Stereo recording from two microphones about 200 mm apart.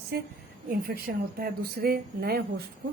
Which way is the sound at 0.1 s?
50° right (ahead or behind).